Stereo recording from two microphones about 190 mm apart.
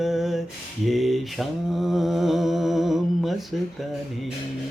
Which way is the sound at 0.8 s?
Centre (ahead or behind).